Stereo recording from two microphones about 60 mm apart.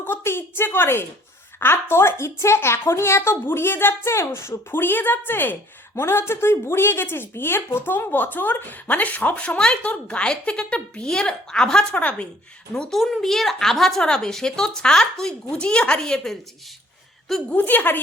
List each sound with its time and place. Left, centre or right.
0.0 s a woman's voice: left; by 17.4 s centre
17.7 s speech: left